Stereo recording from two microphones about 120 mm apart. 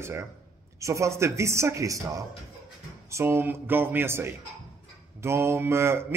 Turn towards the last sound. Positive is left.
turn(degrees=-20)  # may be behind; listen again after turning